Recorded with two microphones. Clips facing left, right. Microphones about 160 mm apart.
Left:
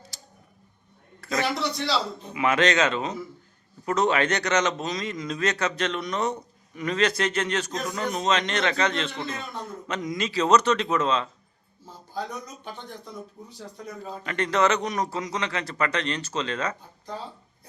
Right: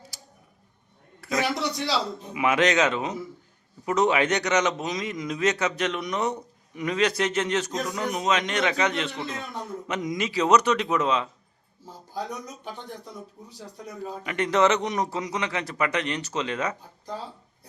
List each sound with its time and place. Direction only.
0.1 s tick-tock: 10° right (ahead or behind)
1.2 s a man's voice: 10° right (ahead or behind)
9.2 s a man's voice: centre (ahead or behind)
9.6 s speech: 15° right (ahead or behind)
13.7 s speech: 10° right (ahead or behind)